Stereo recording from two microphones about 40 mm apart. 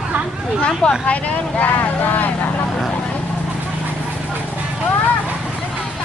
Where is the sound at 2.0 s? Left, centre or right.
Left.